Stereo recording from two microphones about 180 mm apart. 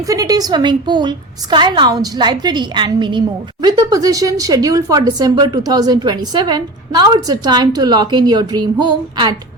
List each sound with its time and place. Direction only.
0.0 s a woman's voice: 20° right (ahead or behind)